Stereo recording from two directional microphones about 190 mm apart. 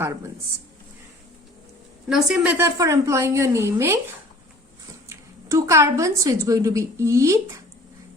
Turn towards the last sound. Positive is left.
turn(degrees=-15)  # may be behind; listen again after turning